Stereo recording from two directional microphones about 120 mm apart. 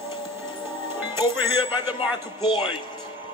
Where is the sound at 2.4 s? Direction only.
45° left (ahead or behind).